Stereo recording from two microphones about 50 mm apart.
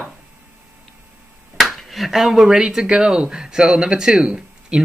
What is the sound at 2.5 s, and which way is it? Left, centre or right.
Speech, centre.